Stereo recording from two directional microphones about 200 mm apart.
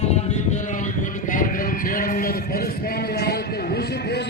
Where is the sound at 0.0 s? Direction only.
35° left (ahead or behind).